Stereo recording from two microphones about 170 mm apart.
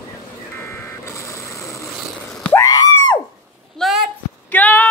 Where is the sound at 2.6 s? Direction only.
25° left (ahead or behind).